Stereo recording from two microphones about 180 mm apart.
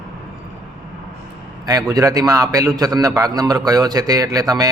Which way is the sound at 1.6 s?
20° right (ahead or behind).